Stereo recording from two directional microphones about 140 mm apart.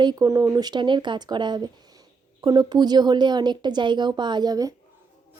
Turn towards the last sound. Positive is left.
turn(degrees=-30)  # may be behind; listen again after turning